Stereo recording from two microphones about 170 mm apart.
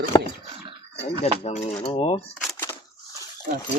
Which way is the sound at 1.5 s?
40° left (ahead or behind).